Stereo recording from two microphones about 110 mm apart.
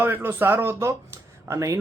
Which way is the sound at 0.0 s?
20° right (ahead or behind).